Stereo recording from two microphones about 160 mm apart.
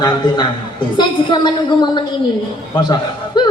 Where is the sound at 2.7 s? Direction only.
25° left (ahead or behind).